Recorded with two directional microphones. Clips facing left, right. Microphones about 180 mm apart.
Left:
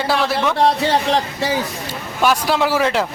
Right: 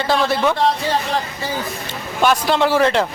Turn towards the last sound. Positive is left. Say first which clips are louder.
# right 2 dB
turn(degrees=5)  # may be behind; listen again after turning